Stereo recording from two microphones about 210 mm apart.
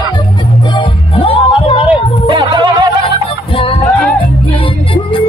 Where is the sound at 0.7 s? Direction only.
25° left (ahead or behind).